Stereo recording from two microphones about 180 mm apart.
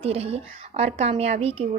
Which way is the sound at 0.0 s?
35° right (ahead or behind).